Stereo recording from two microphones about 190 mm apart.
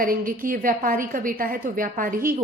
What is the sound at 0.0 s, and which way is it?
A woman's voice, 50° right (ahead or behind).